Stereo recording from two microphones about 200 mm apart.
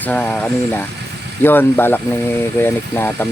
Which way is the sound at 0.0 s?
10° left (ahead or behind).